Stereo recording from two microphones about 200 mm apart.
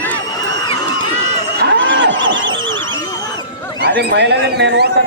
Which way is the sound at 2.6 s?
75° right (ahead or behind).